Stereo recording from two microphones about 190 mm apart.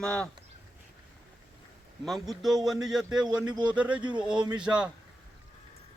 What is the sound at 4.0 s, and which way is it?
Speech, 25° right (ahead or behind).